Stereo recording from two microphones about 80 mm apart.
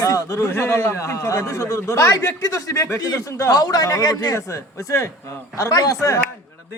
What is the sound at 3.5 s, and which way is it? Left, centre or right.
Speech, left.